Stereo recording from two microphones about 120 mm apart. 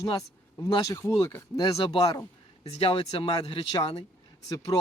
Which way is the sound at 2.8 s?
50° left (ahead or behind).